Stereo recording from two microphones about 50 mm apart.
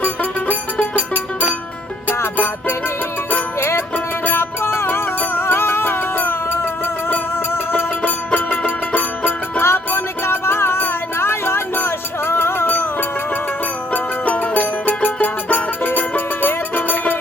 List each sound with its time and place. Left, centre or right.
0.0 s music: left
3.6 s music: left
3.9 s music: left
8.0 s music: left
9.6 s music: left
13.9 s music: left